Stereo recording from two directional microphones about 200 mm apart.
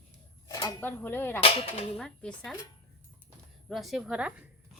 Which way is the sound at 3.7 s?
Centre (ahead or behind).